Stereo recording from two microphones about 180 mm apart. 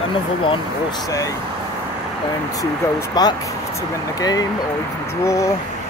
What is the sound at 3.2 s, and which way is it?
Speech, 20° left (ahead or behind).